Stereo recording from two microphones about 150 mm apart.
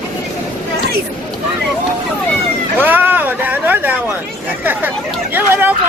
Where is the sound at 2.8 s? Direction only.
10° right (ahead or behind).